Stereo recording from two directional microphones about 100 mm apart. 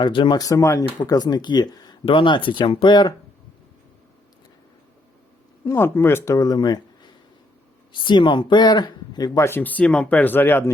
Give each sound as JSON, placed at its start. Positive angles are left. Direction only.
{"t": 0.0, "sound": "speech", "side_deg": 50}
{"t": 0.3, "sound": "speech", "side_deg": 35}
{"t": 5.6, "sound": "speech", "side_deg": 25}
{"t": 6.3, "sound": "speech", "side_deg": 40}
{"t": 9.5, "sound": "speech", "side_deg": 20}